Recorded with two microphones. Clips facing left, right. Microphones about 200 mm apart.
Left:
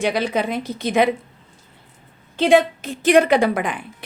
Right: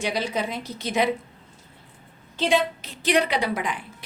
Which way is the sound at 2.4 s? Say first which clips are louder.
Left 7 dB; 55° left (ahead or behind).